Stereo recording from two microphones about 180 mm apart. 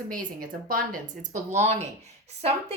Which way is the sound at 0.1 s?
50° right (ahead or behind).